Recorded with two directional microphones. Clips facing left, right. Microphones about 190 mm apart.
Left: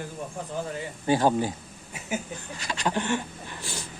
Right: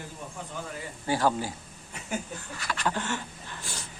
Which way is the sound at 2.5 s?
20° left (ahead or behind).